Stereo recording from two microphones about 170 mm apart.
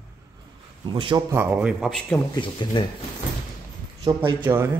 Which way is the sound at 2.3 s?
30° left (ahead or behind).